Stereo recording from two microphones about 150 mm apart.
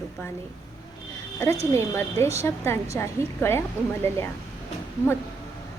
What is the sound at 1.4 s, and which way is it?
A woman's voice, 20° left (ahead or behind).